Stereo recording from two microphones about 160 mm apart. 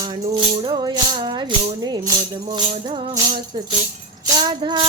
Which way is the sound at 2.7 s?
35° right (ahead or behind).